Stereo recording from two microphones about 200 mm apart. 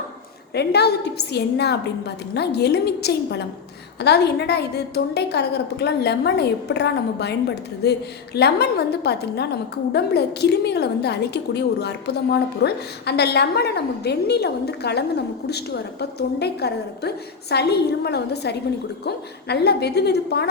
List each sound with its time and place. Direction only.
0.5 s a woman's voice: 55° left (ahead or behind)